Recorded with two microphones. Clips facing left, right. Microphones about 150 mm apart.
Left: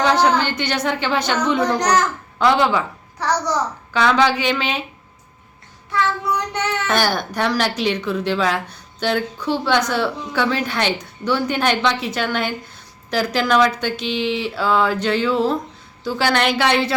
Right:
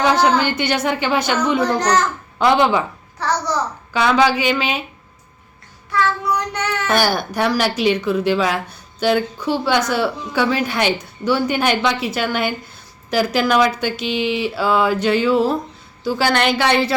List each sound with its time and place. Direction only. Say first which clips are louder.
0.0 s speech: right 1 dB; 15° right (ahead or behind)
3.2 s a child's voice: even; 15° left (ahead or behind)
3.9 s speech: right 1 dB; 10° right (ahead or behind)
5.9 s child singing: right 1 dB; 20° left (ahead or behind)
6.8 s a woman's voice: right 3 dB; 10° right (ahead or behind)